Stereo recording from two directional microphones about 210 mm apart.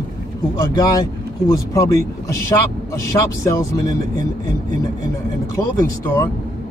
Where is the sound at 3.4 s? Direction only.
15° left (ahead or behind).